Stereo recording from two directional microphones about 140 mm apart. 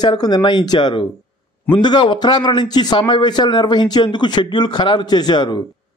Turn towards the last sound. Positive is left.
turn(degrees=30)  # may be behind; listen again after turning